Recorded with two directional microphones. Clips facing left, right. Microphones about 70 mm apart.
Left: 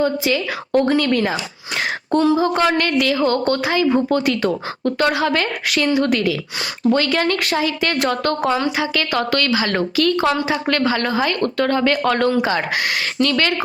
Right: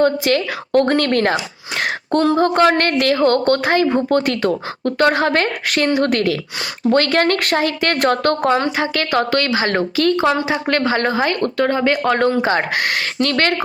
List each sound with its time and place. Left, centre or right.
0.0 s a woman's voice: right